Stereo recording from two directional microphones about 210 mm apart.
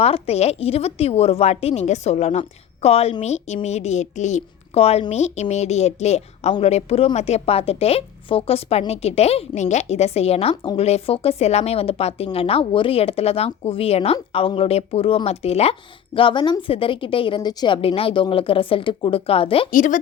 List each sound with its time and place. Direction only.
0.0 s a woman's voice: 30° left (ahead or behind)
19.7 s speech: 40° left (ahead or behind)